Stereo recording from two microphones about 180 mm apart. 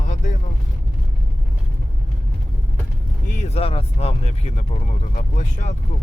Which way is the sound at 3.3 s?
40° left (ahead or behind).